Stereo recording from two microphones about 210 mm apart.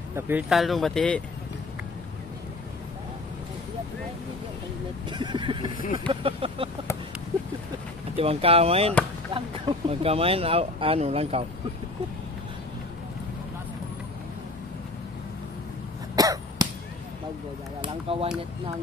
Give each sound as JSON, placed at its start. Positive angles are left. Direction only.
{"t": 0.1, "sound": "speech", "side_deg": -10}
{"t": 5.1, "sound": "speech", "side_deg": -20}
{"t": 8.2, "sound": "speech", "side_deg": -30}
{"t": 16.2, "sound": "cough", "side_deg": -15}
{"t": 17.8, "sound": "a sound", "side_deg": -25}